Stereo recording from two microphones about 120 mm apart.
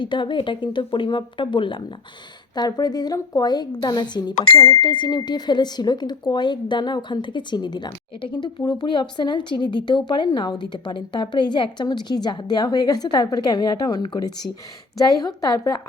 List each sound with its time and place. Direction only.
0.0 s a woman's voice: 40° left (ahead or behind)